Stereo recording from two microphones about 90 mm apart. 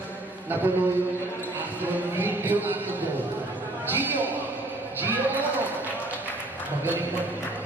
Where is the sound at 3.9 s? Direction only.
20° right (ahead or behind).